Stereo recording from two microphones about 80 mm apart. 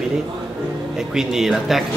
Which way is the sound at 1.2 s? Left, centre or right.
Centre.